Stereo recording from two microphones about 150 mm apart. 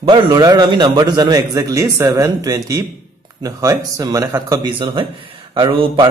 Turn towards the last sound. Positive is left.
turn(degrees=-30)  # may be behind; listen again after turning